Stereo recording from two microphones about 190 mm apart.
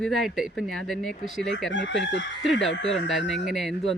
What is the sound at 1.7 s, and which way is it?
Speech, 70° left (ahead or behind).